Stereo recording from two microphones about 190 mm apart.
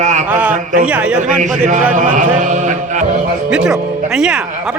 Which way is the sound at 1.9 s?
40° right (ahead or behind).